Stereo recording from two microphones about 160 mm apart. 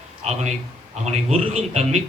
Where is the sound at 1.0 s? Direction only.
45° right (ahead or behind).